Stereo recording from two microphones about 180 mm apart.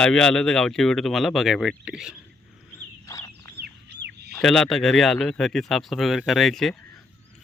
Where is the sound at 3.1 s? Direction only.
15° left (ahead or behind).